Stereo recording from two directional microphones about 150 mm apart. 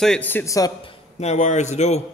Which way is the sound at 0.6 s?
25° left (ahead or behind).